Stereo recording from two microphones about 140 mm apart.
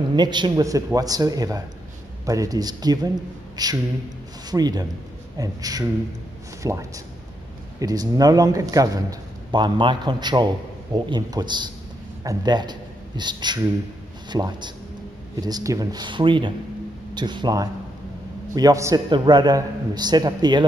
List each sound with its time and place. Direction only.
0.1 s a man's voice: 30° right (ahead or behind)
19.0 s speech: 35° right (ahead or behind)